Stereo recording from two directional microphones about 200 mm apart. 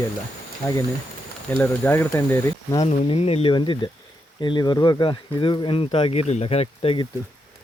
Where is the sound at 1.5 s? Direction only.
10° left (ahead or behind).